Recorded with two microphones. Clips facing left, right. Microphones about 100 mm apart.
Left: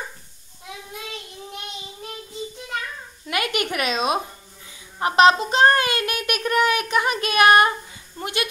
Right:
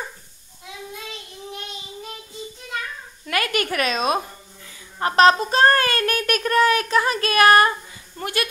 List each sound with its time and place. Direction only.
3.3 s a woman's voice: 20° left (ahead or behind)